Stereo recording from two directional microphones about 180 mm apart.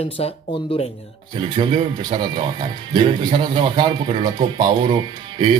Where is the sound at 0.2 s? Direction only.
35° left (ahead or behind).